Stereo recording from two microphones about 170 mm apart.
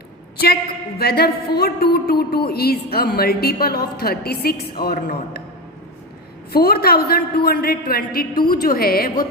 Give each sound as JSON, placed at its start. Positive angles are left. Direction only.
{"t": 0.9, "sound": "a woman's voice", "side_deg": 65}
{"t": 6.5, "sound": "a woman's voice", "side_deg": 65}